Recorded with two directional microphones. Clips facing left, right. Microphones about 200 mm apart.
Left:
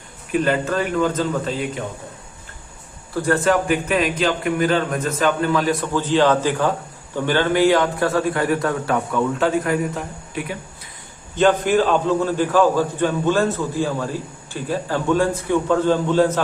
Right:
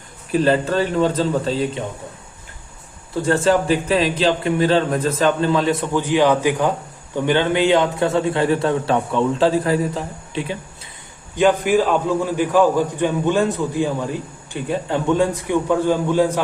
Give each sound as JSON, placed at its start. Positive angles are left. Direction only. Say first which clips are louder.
{"t": 0.3, "sound": "a man's voice", "louder": "right 3 dB", "side_deg": -30}
{"t": 3.2, "sound": "a man's voice", "louder": "right 1 dB", "side_deg": -25}
{"t": 11.3, "sound": "a man's voice", "louder": "right 1 dB", "side_deg": -10}